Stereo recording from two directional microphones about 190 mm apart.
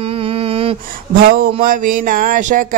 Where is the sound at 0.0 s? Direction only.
30° right (ahead or behind).